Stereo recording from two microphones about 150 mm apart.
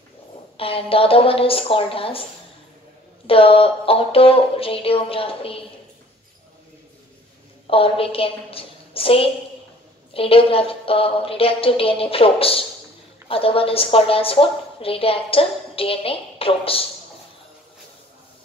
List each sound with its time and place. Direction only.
0.6 s a woman's voice: 40° left (ahead or behind)
3.3 s a woman's voice: 40° left (ahead or behind)
7.6 s a woman's voice: 40° left (ahead or behind)